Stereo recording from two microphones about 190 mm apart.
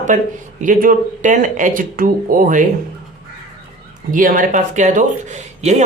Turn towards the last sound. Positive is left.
turn(degrees=-40)  # may be behind; listen again after turning